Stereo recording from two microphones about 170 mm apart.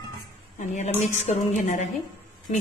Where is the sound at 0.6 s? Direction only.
45° left (ahead or behind).